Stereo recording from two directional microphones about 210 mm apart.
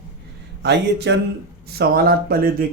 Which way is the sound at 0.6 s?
55° right (ahead or behind).